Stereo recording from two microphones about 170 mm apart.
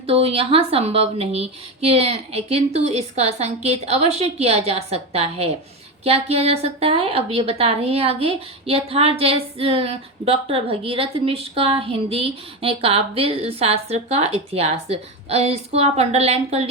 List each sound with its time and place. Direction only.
0.0 s a woman's voice: 35° right (ahead or behind)